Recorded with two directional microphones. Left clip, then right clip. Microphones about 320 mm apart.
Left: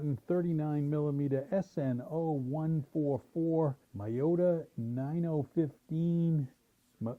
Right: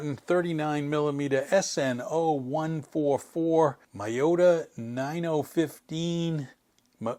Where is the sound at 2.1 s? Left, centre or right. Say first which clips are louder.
Right 9 dB; right.